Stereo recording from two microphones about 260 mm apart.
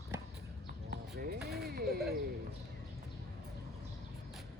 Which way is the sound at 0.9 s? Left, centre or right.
Right.